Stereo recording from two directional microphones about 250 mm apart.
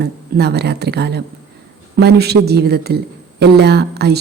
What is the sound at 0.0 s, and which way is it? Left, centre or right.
A woman's voice, right.